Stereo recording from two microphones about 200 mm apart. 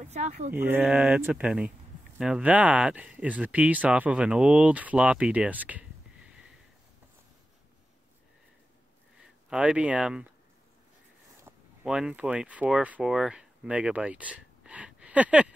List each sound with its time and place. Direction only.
0.0 s speech: 35° right (ahead or behind)
0.5 s speech: 10° right (ahead or behind)
9.5 s speech: 5° right (ahead or behind)
11.4 s speech: 5° right (ahead or behind)